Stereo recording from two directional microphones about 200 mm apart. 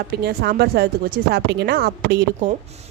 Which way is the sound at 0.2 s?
50° right (ahead or behind).